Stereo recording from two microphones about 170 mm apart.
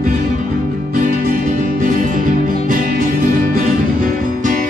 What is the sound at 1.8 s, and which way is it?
Music, 50° right (ahead or behind).